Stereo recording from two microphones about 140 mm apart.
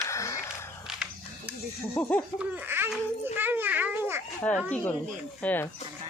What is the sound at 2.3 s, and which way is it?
Speech, 10° right (ahead or behind).